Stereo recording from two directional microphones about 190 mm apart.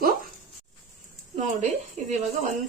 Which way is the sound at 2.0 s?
35° right (ahead or behind).